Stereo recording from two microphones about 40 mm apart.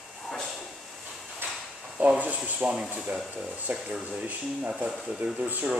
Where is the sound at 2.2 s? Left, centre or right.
Right.